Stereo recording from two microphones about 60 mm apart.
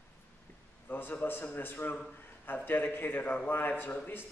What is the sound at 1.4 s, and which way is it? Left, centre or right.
A man's voice, left.